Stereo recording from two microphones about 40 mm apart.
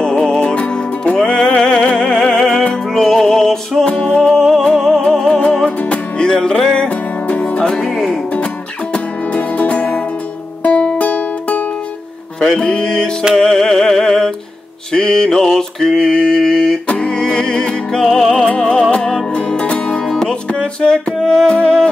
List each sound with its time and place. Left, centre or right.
0.0 s music: left
3.8 s music: left
4.2 s music: centre
8.9 s music: left
12.5 s music: centre
14.9 s mantra: centre
15.9 s a sound: centre
16.8 s music: left
19.3 s music: left